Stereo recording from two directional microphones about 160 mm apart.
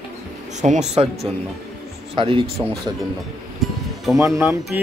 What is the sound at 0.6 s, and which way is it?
Speech, 45° right (ahead or behind).